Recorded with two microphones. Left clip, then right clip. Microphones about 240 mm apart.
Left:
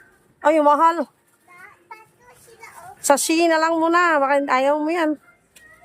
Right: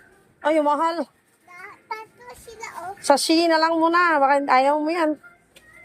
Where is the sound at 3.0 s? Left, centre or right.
Centre.